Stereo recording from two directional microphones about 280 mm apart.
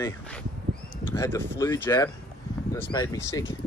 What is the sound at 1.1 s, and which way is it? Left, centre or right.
Speech, centre.